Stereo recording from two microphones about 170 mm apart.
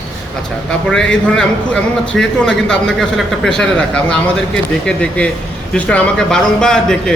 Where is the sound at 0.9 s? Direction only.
5° left (ahead or behind).